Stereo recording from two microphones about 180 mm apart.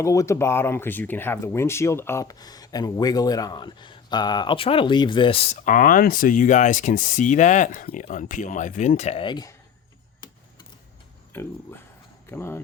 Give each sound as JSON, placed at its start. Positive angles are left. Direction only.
{"t": 0.0, "sound": "speech", "side_deg": 15}
{"t": 5.6, "sound": "speech", "side_deg": 45}
{"t": 11.3, "sound": "speech", "side_deg": 10}